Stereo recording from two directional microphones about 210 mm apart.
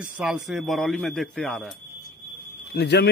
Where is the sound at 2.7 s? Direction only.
50° left (ahead or behind).